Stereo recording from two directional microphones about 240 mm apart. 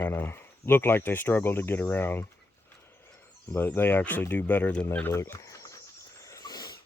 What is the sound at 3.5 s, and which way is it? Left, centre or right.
Speech, centre.